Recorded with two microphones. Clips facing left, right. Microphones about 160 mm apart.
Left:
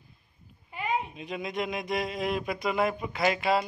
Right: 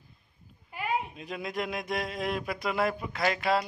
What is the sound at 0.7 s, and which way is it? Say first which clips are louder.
Speech: left 1 dB; 5° right (ahead or behind).